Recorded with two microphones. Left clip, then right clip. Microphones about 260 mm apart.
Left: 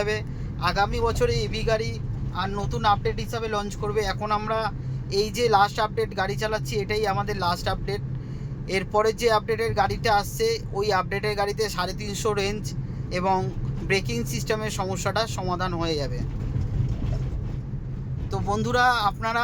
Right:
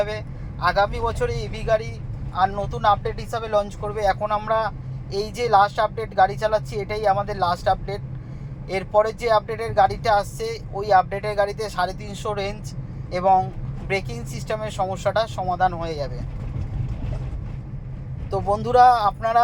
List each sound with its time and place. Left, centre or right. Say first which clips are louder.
0.6 s speech: right 3 dB; centre
18.3 s speech: right 5 dB; centre